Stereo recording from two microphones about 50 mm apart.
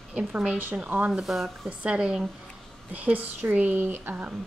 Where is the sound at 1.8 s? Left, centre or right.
Right.